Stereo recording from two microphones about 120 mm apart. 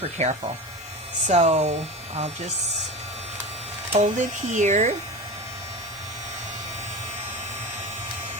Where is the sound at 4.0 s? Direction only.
85° right.